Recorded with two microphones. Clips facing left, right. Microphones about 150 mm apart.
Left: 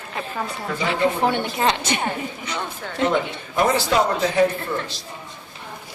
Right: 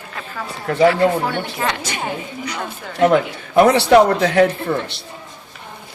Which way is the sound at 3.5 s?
70° right (ahead or behind).